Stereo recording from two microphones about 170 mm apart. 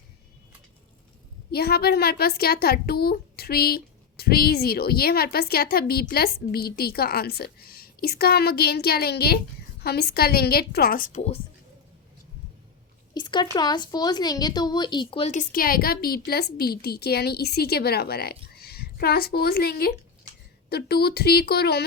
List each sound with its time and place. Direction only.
1.5 s a woman's voice: 70° left (ahead or behind); by 11.2 s 55° left (ahead or behind)
13.1 s speech: 25° left (ahead or behind)
15.3 s a woman's voice: 55° left (ahead or behind); by 21.8 s 70° left (ahead or behind)